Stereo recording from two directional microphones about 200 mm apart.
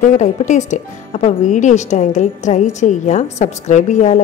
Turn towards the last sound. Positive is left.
turn(degrees=40)  # may be behind; listen again after turning